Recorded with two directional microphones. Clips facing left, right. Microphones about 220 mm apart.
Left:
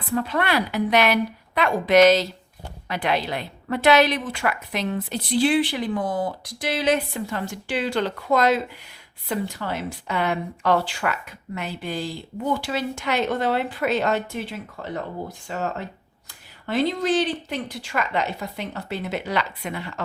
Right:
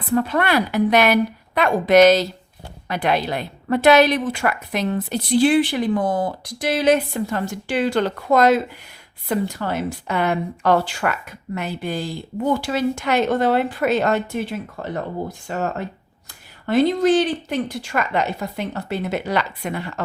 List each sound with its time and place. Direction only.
0.1 s a woman's voice: 50° right (ahead or behind)